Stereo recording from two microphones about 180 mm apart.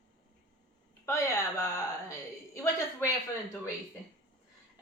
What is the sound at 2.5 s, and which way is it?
Speech, 15° left (ahead or behind).